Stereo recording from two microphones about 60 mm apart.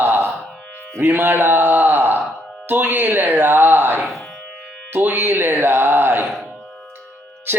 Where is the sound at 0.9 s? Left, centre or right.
Right.